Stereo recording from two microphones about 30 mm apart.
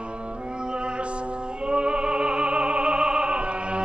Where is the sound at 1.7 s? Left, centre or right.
Right.